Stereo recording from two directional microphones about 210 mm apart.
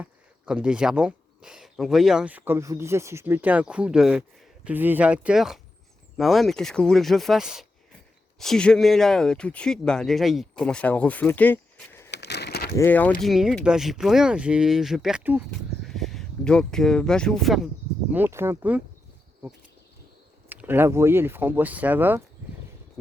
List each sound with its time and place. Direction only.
0.0 s speech: 5° right (ahead or behind); by 12.1 s 10° left (ahead or behind)
12.1 s a sound: 50° left (ahead or behind)
12.7 s speech: 10° left (ahead or behind)
18.1 s speech: 10° right (ahead or behind)
20.5 s speech: 10° right (ahead or behind)